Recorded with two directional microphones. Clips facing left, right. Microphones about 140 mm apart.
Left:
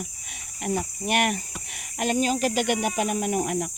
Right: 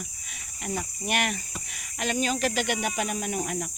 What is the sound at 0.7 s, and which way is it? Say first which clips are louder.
Speech: left 4 dB; 40° left (ahead or behind).